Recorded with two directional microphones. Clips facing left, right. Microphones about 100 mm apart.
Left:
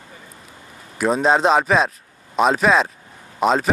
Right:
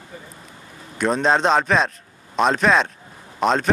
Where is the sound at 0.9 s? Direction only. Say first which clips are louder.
Left 2 dB; 5° left (ahead or behind).